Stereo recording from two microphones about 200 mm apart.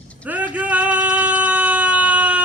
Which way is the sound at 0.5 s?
5° right (ahead or behind).